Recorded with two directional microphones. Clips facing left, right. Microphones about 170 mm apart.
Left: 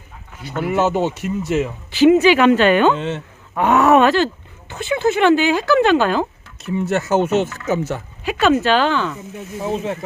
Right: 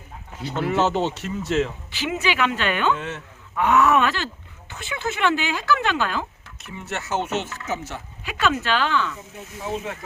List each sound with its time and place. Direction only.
0.4 s speech: 10° left (ahead or behind)
1.9 s speech: 40° left (ahead or behind)
2.9 s speech: 25° left (ahead or behind)
3.5 s speech: 40° left (ahead or behind)
8.2 s speech: 35° left (ahead or behind)